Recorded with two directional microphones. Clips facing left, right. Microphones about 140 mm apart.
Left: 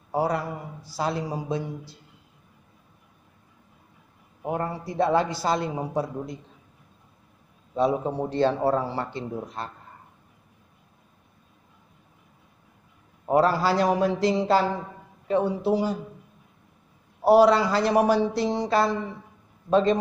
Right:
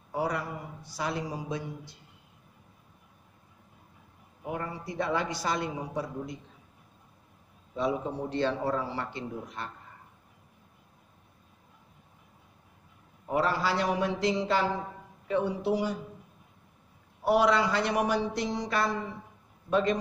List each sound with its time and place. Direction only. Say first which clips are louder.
0.1 s a man's voice: left 6 dB; 35° left (ahead or behind)
4.5 s a man's voice: left 6 dB; 35° left (ahead or behind)
7.7 s a man's voice: left 6 dB; 35° left (ahead or behind)
13.3 s a man's voice: left 7 dB; 40° left (ahead or behind)
17.2 s a man's voice: left 7 dB; 35° left (ahead or behind)